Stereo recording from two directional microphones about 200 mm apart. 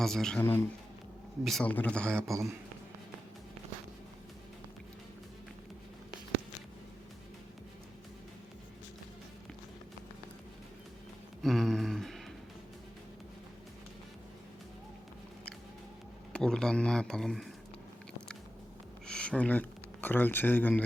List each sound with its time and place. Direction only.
0.0 s speech: centre (ahead or behind)
2.2 s a man's voice: 15° right (ahead or behind)
11.4 s a sound: centre (ahead or behind)
16.3 s speech: 5° left (ahead or behind)
19.0 s speech: 5° left (ahead or behind)